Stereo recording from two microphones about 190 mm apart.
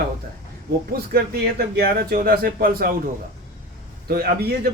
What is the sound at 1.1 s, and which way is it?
A man's voice, 55° right (ahead or behind).